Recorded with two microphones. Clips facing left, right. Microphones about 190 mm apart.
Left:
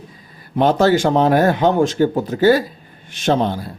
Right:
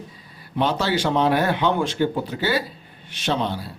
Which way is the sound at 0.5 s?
50° left (ahead or behind).